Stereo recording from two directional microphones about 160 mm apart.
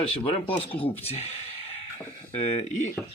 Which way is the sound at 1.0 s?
40° left (ahead or behind).